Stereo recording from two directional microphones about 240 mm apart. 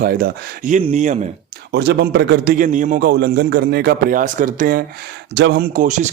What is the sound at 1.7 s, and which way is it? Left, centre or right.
A man's voice, right.